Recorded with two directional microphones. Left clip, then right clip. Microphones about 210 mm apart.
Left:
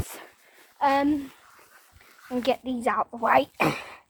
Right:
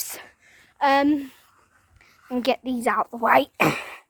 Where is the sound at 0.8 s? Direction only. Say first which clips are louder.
Right 3 dB; 75° right (ahead or behind).